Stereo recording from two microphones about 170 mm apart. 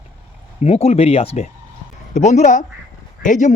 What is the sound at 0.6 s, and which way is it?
Speech, 40° left (ahead or behind).